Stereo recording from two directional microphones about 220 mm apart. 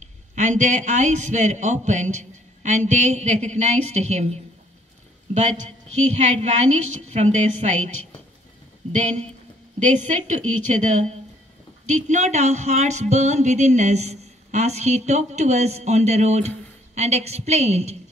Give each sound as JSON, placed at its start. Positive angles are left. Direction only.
{"t": 0.4, "sound": "speech", "side_deg": -35}
{"t": 9.8, "sound": "speech", "side_deg": -35}